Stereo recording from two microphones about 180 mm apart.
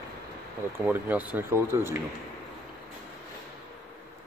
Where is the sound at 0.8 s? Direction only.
10° right (ahead or behind).